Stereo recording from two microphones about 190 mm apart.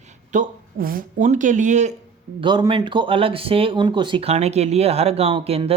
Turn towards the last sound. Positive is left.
turn(degrees=-30)  # may be behind; listen again after turning